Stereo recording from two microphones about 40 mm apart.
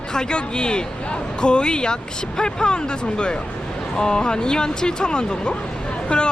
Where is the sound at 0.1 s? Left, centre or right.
Left.